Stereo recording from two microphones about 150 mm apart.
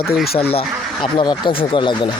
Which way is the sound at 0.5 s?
35° left (ahead or behind).